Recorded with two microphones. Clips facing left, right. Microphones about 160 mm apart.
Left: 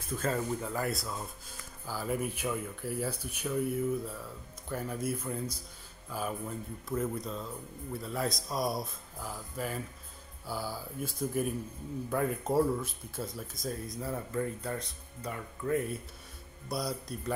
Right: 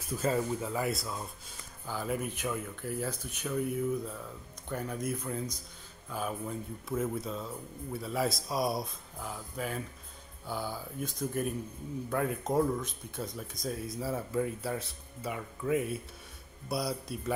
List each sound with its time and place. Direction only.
0.1 s speech: 5° right (ahead or behind)